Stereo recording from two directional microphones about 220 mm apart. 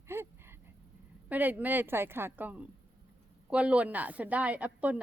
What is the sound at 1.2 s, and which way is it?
A woman's voice, 10° right (ahead or behind).